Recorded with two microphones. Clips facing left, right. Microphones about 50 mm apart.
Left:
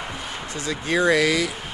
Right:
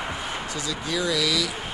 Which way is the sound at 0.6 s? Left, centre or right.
Left.